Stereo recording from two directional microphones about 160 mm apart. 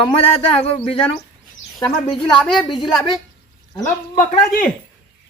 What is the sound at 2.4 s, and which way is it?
Speech, centre (ahead or behind).